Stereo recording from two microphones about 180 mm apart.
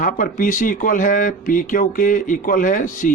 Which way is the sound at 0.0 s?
50° left (ahead or behind).